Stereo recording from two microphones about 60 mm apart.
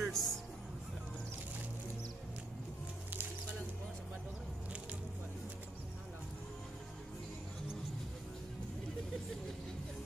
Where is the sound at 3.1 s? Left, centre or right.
Right.